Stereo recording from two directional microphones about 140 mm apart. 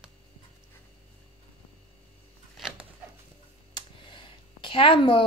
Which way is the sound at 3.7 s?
35° left (ahead or behind).